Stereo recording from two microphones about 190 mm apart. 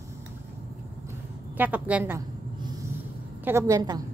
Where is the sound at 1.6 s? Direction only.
10° right (ahead or behind).